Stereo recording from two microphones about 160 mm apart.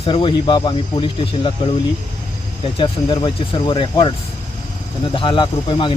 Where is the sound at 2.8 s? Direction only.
30° left (ahead or behind).